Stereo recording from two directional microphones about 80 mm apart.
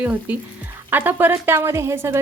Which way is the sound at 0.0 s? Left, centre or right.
Centre.